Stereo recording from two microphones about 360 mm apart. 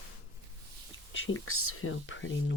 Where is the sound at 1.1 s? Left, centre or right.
Left.